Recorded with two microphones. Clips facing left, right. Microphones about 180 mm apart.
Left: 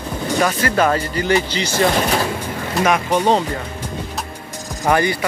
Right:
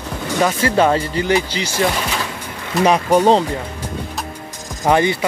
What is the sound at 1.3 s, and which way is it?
Speech, 10° right (ahead or behind).